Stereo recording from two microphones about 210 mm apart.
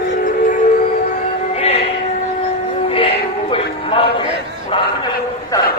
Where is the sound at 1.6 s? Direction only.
30° left (ahead or behind).